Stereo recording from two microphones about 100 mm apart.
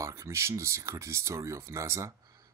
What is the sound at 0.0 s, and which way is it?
Speech, 30° right (ahead or behind).